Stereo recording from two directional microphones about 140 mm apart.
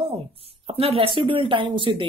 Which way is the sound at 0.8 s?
45° right (ahead or behind).